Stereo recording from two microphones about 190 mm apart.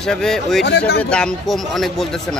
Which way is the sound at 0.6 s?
60° left (ahead or behind).